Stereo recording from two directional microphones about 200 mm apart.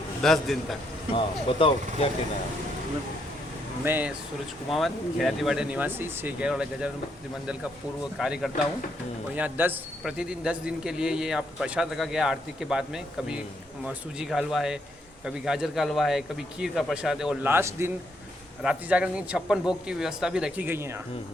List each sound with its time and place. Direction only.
0.2 s a man's voice: centre (ahead or behind)
1.1 s speech: 25° left (ahead or behind)
3.8 s a man's voice: 10° right (ahead or behind)
8.2 s a man's voice: centre (ahead or behind)